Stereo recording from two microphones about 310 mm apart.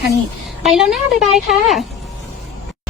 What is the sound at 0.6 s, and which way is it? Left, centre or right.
A woman's voice, centre.